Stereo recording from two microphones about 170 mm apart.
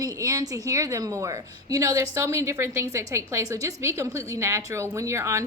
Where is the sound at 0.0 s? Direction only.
20° right (ahead or behind).